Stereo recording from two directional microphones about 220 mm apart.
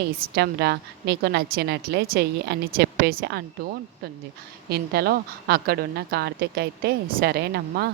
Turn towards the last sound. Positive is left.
turn(degrees=-45)  # may be behind; listen again after turning